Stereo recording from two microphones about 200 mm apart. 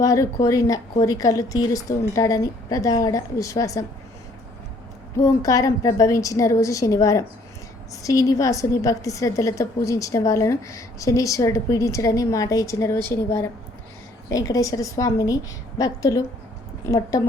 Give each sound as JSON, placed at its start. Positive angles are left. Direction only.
{"t": 0.0, "sound": "a woman's voice", "side_deg": 15}
{"t": 5.2, "sound": "a woman's voice", "side_deg": 15}